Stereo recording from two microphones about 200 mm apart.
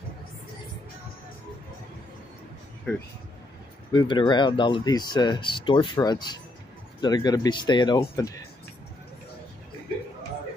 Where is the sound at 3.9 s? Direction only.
25° left (ahead or behind).